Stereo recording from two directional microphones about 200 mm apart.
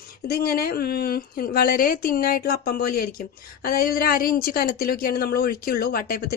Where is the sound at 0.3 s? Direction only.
50° left (ahead or behind).